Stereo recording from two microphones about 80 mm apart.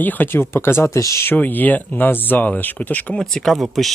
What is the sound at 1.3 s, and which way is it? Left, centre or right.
Speech, left.